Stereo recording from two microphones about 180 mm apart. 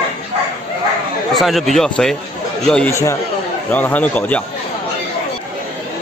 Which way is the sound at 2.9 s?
15° left (ahead or behind).